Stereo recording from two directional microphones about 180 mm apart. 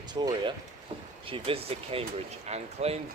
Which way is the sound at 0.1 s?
25° right (ahead or behind).